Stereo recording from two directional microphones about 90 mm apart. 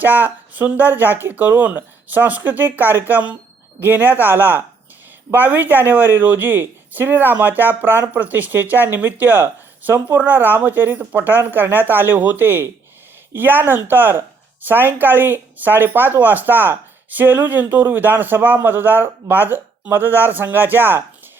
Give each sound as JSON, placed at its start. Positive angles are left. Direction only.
{"t": 0.0, "sound": "speech", "side_deg": -20}